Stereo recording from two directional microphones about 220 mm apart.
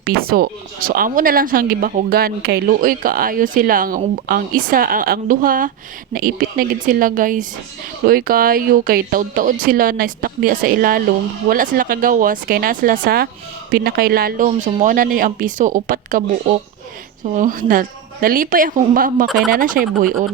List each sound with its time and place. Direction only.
0.0 s speech: 45° right (ahead or behind)
17.3 s speech: 35° right (ahead or behind)